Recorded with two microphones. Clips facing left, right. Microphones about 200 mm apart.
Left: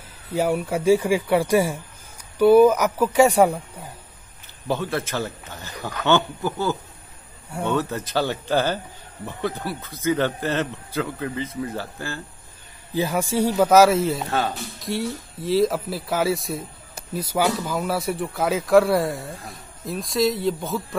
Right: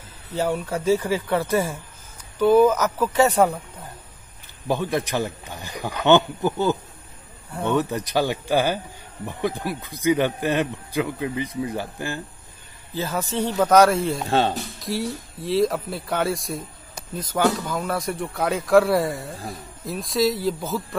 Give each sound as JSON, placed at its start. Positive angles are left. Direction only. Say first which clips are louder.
{"t": 0.3, "sound": "speech", "louder": "left 2 dB", "side_deg": 10}
{"t": 4.6, "sound": "a man's voice", "louder": "right 2 dB", "side_deg": -15}
{"t": 12.9, "sound": "speech", "louder": "left 4 dB", "side_deg": 15}